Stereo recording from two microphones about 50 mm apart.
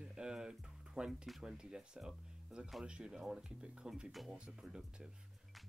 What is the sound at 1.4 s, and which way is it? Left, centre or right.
Speech, centre.